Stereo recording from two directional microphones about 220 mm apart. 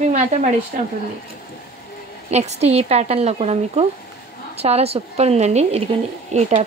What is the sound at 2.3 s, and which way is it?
A woman's voice, 30° right (ahead or behind).